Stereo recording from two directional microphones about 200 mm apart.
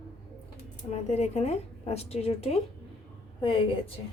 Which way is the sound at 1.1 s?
35° left (ahead or behind).